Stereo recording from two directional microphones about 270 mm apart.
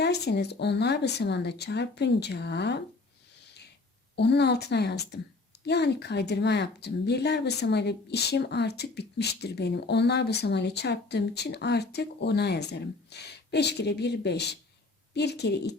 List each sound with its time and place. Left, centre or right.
0.0 s a woman's voice: left
3.4 s a sound: left
4.1 s a woman's voice: left